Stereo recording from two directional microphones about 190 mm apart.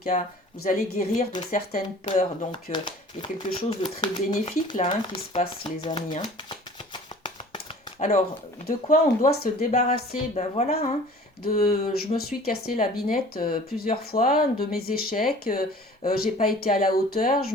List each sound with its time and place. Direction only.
0.1 s a woman's voice: 40° left (ahead or behind)
0.6 s speech: 50° left (ahead or behind)
1.2 s speech: 30° left (ahead or behind)
1.5 s speech: 50° left (ahead or behind)
2.0 s a woman's voice: 40° left (ahead or behind)
2.5 s speech: 25° left (ahead or behind)
6.9 s shuffling cards: 25° left (ahead or behind)
8.6 s speech: 50° left (ahead or behind)
9.7 s a woman's voice: 35° left (ahead or behind)
11.4 s speech: 50° left (ahead or behind)